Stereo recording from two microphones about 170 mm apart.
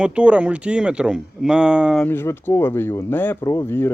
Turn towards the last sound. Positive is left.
turn(degrees=15)  # may be behind; listen again after turning